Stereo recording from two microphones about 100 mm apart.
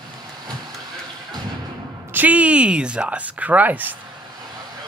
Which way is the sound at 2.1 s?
15° right (ahead or behind).